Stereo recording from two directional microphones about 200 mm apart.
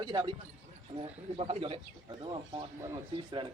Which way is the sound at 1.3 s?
30° right (ahead or behind).